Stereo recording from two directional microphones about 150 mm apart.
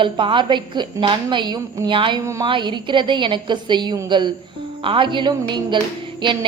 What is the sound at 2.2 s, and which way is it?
Speech, 20° right (ahead or behind).